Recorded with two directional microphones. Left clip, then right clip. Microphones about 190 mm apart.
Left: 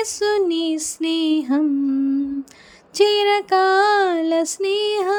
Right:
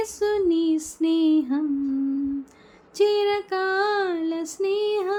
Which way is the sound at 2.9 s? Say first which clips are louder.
Left 5 dB; 45° left (ahead or behind).